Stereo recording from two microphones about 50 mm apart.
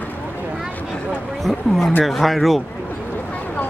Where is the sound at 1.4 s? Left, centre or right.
Centre.